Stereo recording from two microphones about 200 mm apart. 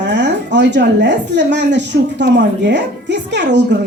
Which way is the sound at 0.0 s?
60° right (ahead or behind).